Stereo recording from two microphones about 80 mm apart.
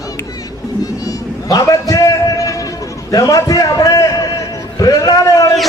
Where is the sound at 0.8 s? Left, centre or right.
Left.